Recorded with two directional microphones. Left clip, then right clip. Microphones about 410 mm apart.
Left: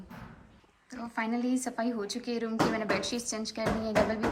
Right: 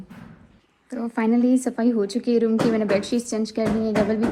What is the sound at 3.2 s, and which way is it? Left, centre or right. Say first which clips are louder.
A woman's voice: right 8 dB; centre.